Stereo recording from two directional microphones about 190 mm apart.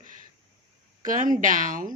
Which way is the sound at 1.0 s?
45° right (ahead or behind).